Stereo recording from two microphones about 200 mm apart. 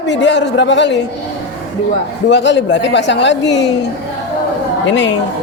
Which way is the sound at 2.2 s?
60° left (ahead or behind).